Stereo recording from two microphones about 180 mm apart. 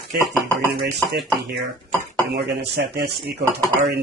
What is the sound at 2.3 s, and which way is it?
Speech, 65° right (ahead or behind).